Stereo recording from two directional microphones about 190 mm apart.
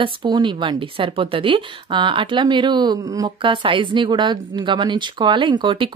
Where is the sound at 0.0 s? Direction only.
25° right (ahead or behind).